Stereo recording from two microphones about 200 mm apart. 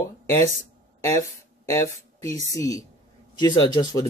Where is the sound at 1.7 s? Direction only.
15° left (ahead or behind).